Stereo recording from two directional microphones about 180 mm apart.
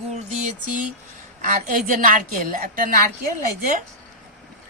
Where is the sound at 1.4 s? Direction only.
45° right (ahead or behind).